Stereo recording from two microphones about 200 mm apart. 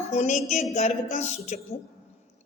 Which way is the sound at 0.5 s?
35° left (ahead or behind).